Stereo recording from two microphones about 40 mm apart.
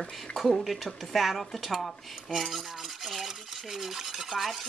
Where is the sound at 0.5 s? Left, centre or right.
Centre.